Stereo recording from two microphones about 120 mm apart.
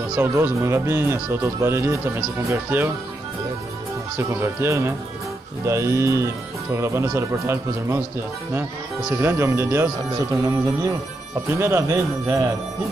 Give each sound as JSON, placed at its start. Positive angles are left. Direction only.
{"t": 0.2, "sound": "speech", "side_deg": -20}
{"t": 4.2, "sound": "speech", "side_deg": -25}
{"t": 9.1, "sound": "speech", "side_deg": -20}